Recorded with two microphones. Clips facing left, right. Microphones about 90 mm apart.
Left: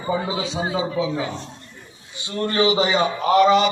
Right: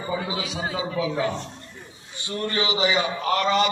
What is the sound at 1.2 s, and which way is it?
Mantra, 20° left (ahead or behind).